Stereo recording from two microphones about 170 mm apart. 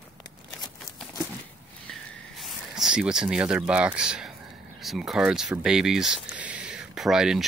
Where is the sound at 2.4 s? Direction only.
Centre (ahead or behind).